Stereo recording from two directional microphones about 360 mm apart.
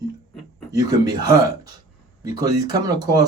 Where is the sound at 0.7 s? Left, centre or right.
Centre.